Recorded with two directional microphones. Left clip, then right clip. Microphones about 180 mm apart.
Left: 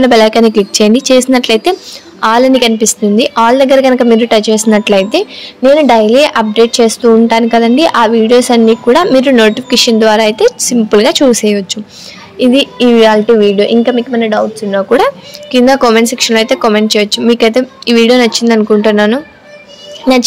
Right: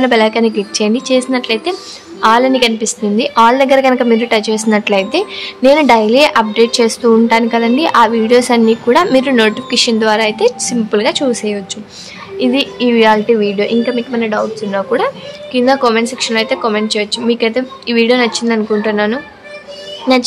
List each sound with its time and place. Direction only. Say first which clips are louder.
0.0 s a woman's voice: left 5 dB; 30° left (ahead or behind)
15.0 s speech: left 6 dB; 35° left (ahead or behind)